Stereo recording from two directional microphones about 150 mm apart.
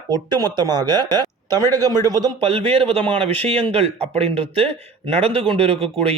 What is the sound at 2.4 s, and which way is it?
A man's voice, 40° right (ahead or behind).